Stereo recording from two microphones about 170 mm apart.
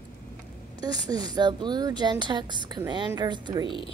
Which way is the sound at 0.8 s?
25° right (ahead or behind).